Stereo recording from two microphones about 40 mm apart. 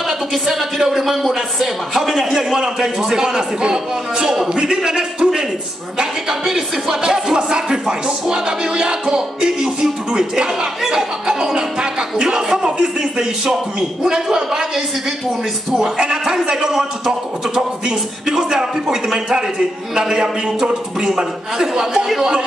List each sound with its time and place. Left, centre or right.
0.3 s music: centre
15.7 s music: centre
20.0 s a man's voice: centre
21.2 s music: centre